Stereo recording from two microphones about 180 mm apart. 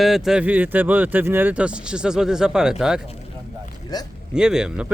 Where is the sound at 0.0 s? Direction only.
Centre (ahead or behind).